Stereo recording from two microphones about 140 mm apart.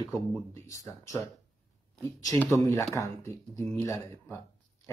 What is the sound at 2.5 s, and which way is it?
Speech, 20° left (ahead or behind).